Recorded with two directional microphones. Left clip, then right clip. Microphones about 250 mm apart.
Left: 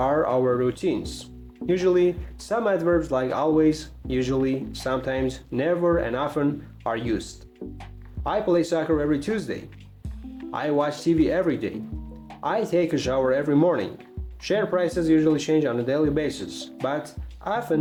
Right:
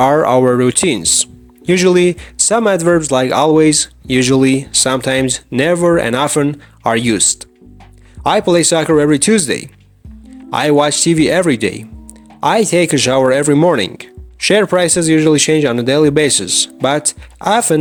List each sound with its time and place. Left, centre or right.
0.0 s speech: right